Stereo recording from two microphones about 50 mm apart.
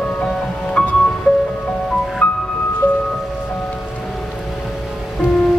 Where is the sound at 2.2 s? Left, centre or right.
Left.